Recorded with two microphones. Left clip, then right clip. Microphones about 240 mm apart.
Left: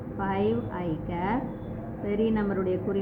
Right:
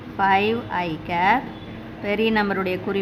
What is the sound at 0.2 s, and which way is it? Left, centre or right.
A woman's voice, right.